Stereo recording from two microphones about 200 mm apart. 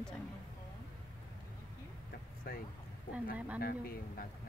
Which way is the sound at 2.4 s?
50° left (ahead or behind).